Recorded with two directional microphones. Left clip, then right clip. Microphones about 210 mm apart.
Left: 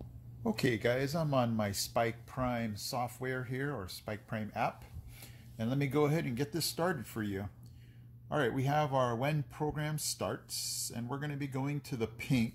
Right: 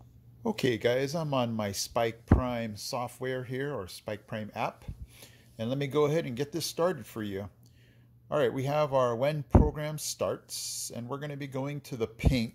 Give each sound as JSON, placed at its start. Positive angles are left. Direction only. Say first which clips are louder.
{"t": 0.4, "sound": "speech", "louder": "right 4 dB", "side_deg": -40}